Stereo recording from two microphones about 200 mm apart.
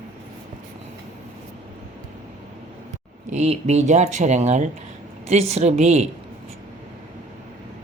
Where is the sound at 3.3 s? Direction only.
35° right (ahead or behind).